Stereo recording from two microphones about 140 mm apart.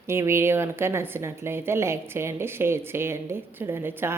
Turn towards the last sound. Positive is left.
turn(degrees=-15)  # may be behind; listen again after turning